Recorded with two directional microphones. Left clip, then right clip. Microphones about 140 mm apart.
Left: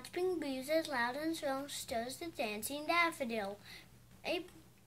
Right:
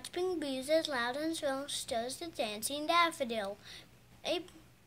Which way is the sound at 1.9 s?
30° right (ahead or behind).